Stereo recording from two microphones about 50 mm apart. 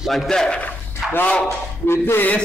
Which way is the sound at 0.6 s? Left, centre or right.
Left.